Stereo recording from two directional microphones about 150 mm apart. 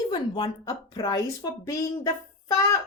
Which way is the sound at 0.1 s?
30° left (ahead or behind).